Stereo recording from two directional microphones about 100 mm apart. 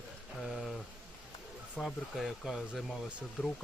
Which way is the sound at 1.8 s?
5° right (ahead or behind).